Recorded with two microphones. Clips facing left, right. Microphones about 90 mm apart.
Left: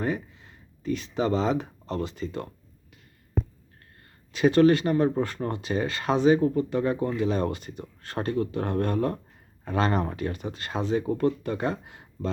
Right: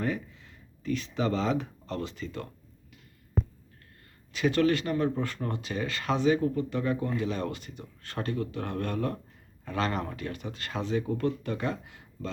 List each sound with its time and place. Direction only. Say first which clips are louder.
0.0 s speech: left 3 dB; 25° left (ahead or behind)
4.3 s speech: left 6 dB; 30° left (ahead or behind)